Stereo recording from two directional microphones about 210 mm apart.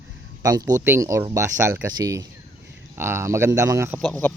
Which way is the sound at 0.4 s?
15° right (ahead or behind).